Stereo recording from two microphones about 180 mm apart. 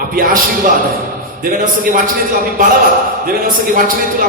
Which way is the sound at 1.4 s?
50° right (ahead or behind).